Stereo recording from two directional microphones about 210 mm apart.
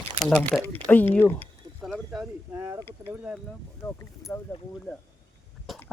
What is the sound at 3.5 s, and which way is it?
Speech, 10° left (ahead or behind).